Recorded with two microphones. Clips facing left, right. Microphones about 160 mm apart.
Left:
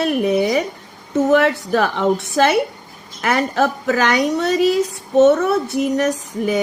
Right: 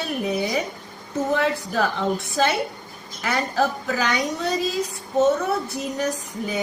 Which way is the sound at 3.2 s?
75° left (ahead or behind).